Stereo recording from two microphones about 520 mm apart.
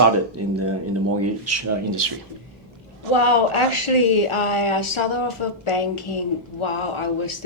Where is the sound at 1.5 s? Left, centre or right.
Right.